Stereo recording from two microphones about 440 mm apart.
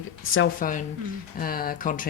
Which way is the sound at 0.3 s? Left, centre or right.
Centre.